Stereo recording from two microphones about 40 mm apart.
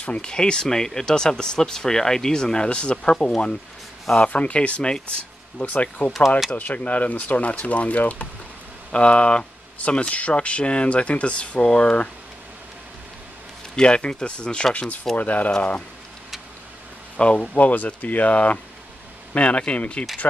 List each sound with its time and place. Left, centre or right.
0.0 s speech: left
5.7 s speech: left
13.7 s speech: left
15.1 s speech: left
17.2 s speech: left
17.6 s speech: left